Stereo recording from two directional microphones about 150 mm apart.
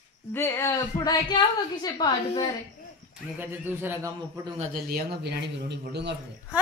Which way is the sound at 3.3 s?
15° right (ahead or behind).